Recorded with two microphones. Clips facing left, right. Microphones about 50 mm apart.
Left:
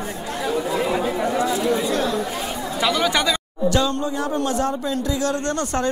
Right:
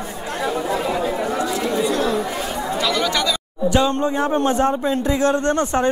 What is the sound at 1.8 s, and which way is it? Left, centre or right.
Speech, right.